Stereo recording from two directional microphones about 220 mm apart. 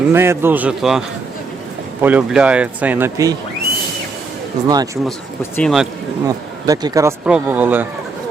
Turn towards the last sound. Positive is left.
turn(degrees=-10)  # may be behind; listen again after turning